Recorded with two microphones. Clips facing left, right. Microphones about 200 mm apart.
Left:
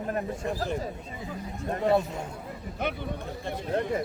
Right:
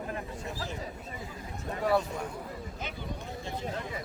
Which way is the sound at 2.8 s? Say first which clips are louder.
Left 10 dB; 60° left (ahead or behind).